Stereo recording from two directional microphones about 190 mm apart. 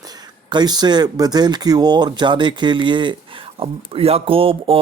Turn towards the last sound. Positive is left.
turn(degrees=-30)  # may be behind; listen again after turning